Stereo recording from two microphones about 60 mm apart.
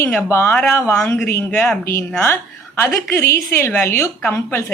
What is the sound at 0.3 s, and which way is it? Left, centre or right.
Speech, left.